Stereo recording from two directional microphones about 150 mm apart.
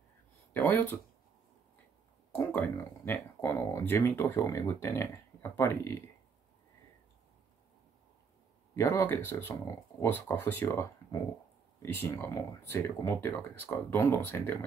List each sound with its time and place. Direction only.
0.5 s speech: 10° left (ahead or behind)
2.3 s speech: 10° left (ahead or behind)
8.7 s speech: 15° left (ahead or behind)